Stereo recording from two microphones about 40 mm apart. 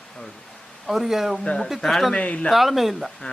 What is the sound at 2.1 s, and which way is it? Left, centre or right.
Speech, left.